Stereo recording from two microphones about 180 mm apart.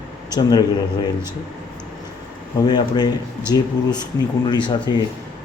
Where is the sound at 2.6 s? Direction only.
25° left (ahead or behind).